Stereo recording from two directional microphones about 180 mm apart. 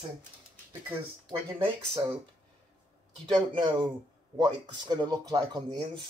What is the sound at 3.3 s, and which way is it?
Speech, 25° right (ahead or behind).